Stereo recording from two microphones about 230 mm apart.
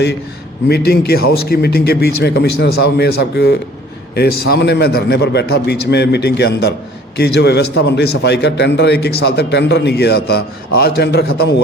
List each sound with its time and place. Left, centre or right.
0.7 s a man's voice: left